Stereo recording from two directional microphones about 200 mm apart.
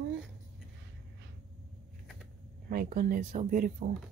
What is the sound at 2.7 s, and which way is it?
A woman's voice, 45° right (ahead or behind).